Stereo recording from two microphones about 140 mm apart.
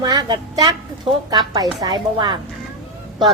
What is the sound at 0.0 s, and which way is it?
A woman's voice, 30° right (ahead or behind).